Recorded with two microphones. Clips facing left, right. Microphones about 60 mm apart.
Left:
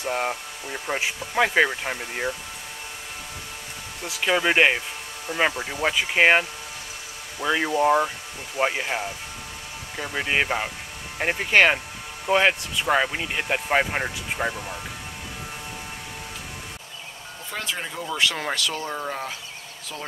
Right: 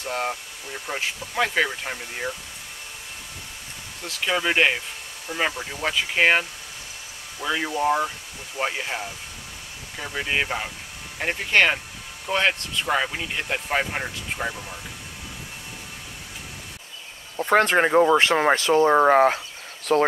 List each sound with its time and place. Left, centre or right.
0.0 s speech: centre
4.0 s speech: centre
17.4 s speech: right
18.9 s speech: right